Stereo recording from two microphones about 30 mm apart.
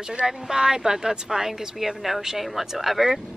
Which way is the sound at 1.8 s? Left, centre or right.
Centre.